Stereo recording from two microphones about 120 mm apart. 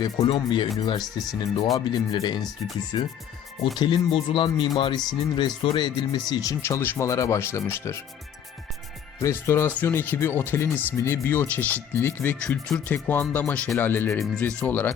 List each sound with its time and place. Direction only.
0.0 s speech: 35° left (ahead or behind)
9.2 s speech: 25° left (ahead or behind)